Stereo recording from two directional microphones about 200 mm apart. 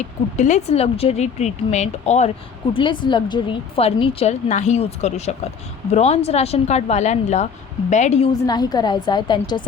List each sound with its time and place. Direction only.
0.3 s a woman's voice: 35° left (ahead or behind)
2.7 s a woman's voice: 25° left (ahead or behind)
8.3 s a woman's voice: 20° left (ahead or behind)